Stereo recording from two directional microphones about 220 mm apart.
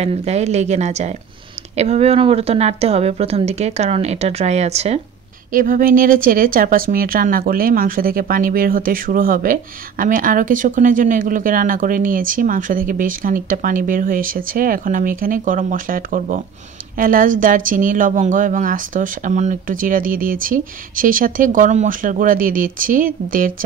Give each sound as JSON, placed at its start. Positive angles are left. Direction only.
{"t": 0.0, "sound": "speech", "side_deg": -30}